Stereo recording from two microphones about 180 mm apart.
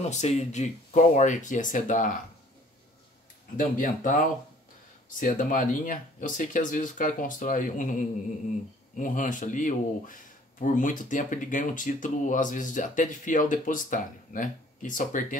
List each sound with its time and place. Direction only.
0.1 s speech: 40° left (ahead or behind)
3.5 s speech: 50° left (ahead or behind)